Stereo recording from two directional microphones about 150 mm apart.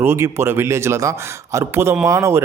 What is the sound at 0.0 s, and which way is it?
Speech, 15° right (ahead or behind).